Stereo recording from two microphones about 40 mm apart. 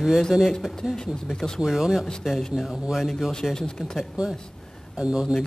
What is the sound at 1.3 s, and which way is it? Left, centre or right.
Speech, centre.